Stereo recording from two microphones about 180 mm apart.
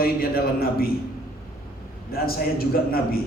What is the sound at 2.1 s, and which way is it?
A man's voice, 55° left (ahead or behind).